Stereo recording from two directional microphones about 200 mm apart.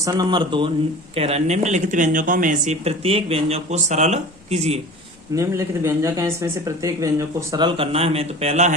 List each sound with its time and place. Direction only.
0.0 s speech: 20° right (ahead or behind)
5.3 s speech: 15° right (ahead or behind); by 8.7 s 35° right (ahead or behind)